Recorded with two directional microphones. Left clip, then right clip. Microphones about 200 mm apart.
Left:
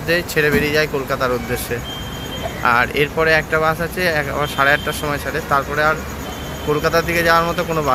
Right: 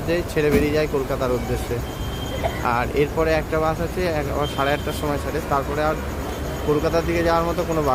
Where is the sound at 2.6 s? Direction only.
Centre (ahead or behind).